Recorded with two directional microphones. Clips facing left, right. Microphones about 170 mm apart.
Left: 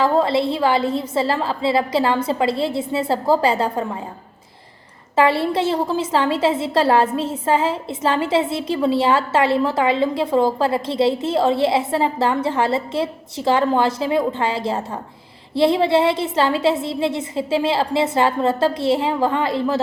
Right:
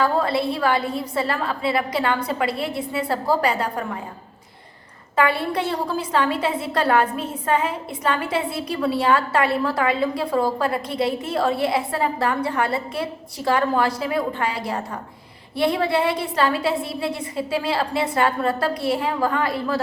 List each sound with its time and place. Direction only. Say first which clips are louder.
0.0 s a woman's voice: left 3 dB; 25° left (ahead or behind)
5.1 s a woman's voice: left 4 dB; 25° left (ahead or behind)